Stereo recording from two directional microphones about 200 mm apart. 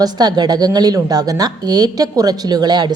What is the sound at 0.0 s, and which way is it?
A woman's voice, 20° right (ahead or behind).